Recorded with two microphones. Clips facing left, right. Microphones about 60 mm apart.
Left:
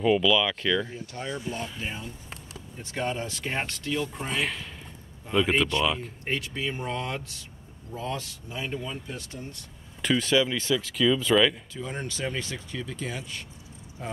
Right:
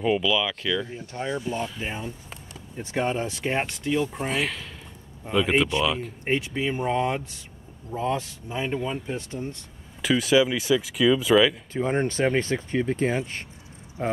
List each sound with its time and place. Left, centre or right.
0.0 s speech: centre
0.9 s speech: centre
4.3 s speech: centre
5.7 s speech: centre
10.0 s speech: centre
11.7 s speech: right